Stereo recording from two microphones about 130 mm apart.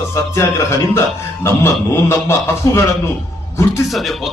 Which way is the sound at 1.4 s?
20° left (ahead or behind).